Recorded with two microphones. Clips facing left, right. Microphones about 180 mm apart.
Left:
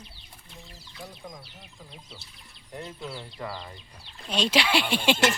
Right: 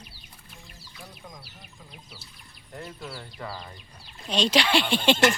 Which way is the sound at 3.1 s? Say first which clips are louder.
Left 1 dB; 20° left (ahead or behind).